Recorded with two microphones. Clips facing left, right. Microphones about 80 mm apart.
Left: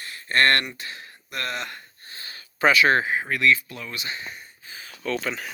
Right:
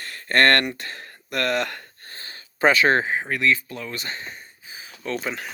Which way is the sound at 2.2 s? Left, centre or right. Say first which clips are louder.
Right 2 dB; right.